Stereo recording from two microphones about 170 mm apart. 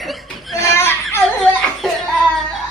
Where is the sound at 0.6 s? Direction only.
15° left (ahead or behind).